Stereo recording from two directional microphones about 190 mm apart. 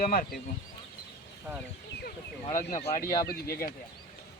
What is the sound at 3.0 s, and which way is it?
Speech, 20° left (ahead or behind).